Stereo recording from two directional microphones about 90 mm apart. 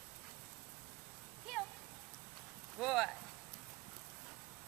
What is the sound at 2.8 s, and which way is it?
Speech, centre (ahead or behind).